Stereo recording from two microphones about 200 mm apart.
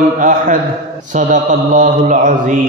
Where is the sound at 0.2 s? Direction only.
40° right (ahead or behind).